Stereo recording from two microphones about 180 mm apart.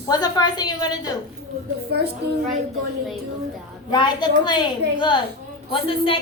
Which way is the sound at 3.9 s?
25° left (ahead or behind).